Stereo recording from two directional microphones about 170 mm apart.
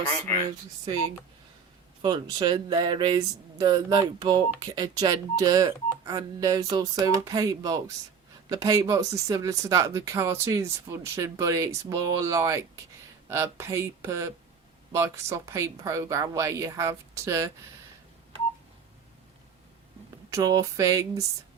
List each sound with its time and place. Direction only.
2.0 s speech: 25° right (ahead or behind)
20.3 s speech: 20° right (ahead or behind)